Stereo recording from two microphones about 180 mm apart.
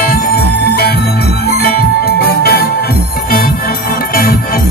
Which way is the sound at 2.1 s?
60° left (ahead or behind).